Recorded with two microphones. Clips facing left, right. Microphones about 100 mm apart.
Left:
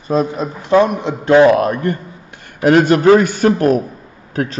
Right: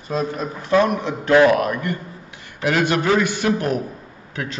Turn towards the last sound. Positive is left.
turn(degrees=40)  # may be behind; listen again after turning